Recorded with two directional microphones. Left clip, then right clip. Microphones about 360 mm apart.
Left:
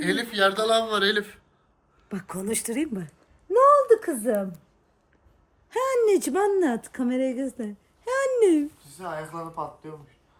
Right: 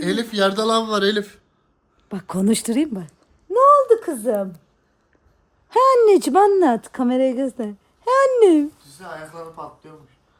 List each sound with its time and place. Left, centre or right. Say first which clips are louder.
0.0 s speech: right 3 dB; centre
3.6 s a sound: right 4 dB; centre
5.6 s speech: right 9 dB; right
9.0 s speech: left 2 dB; centre